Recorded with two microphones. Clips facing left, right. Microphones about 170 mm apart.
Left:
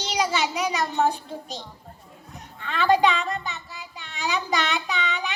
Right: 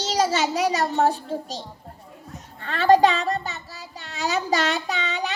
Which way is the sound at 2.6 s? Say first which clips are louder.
Right 4 dB; 40° right (ahead or behind).